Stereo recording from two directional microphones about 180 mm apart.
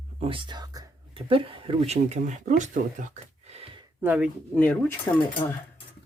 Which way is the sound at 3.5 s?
30° right (ahead or behind).